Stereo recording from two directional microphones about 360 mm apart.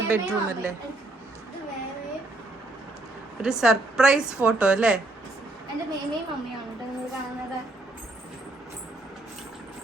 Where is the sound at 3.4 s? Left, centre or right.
Centre.